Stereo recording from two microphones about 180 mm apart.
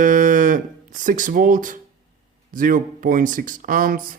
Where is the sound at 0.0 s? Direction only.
45° right (ahead or behind).